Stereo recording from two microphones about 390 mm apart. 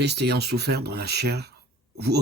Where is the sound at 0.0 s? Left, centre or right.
Right.